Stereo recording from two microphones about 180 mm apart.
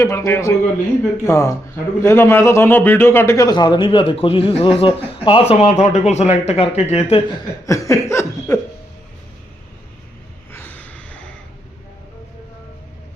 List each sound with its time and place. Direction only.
0.0 s a man's voice: 15° left (ahead or behind); by 7.2 s 35° left (ahead or behind)
7.7 s laughter: 15° left (ahead or behind)
10.5 s gasp: 10° left (ahead or behind)